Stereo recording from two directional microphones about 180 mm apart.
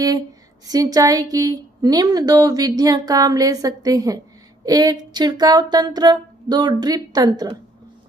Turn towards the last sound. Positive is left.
turn(degrees=-20)  # may be behind; listen again after turning